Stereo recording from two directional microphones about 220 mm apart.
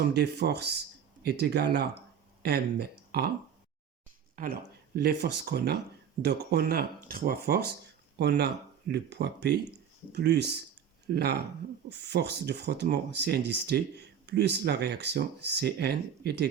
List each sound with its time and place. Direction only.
0.0 s speech: 50° right (ahead or behind)
4.4 s speech: 40° right (ahead or behind)